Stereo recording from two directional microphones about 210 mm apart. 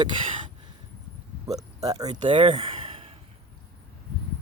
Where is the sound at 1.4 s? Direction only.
15° right (ahead or behind).